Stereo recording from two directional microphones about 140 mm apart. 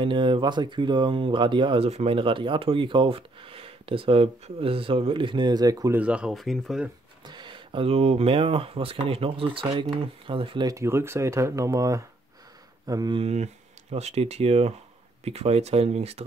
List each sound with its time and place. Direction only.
0.0 s speech: 35° right (ahead or behind)
5.9 s speech: 10° right (ahead or behind)
7.2 s speech: 35° right (ahead or behind)
10.7 s speech: 20° right (ahead or behind)
13.2 s speech: 50° right (ahead or behind)